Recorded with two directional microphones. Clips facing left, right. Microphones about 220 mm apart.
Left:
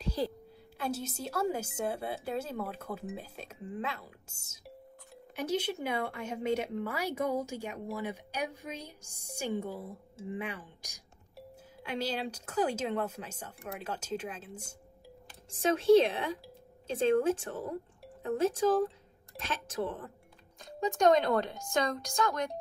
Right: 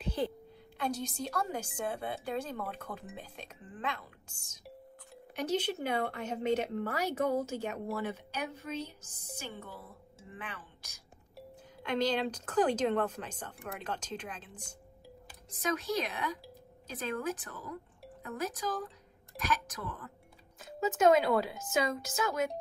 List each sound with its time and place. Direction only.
0.7 s a woman's voice: 5° left (ahead or behind)
15.5 s a woman's voice: 30° left (ahead or behind)
20.6 s a woman's voice: 5° right (ahead or behind)